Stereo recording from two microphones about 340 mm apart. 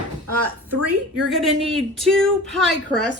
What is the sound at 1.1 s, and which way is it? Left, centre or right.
Speech, centre.